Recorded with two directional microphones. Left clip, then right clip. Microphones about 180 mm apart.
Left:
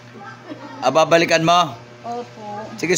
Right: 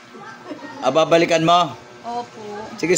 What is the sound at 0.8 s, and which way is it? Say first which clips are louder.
Speech: left 1 dB; 25° left (ahead or behind).